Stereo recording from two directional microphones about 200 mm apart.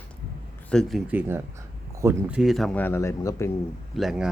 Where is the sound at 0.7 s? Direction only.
Centre (ahead or behind).